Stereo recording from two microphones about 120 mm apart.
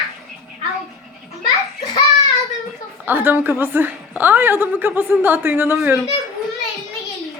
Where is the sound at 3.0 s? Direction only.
15° right (ahead or behind).